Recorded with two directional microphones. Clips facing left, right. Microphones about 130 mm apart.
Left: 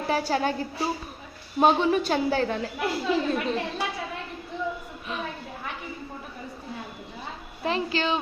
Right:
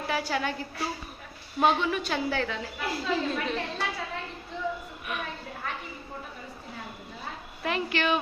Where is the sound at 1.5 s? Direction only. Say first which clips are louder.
Left 4 dB; 35° left (ahead or behind).